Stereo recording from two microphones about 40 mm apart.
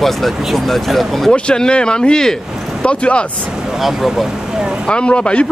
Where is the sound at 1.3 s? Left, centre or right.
Left.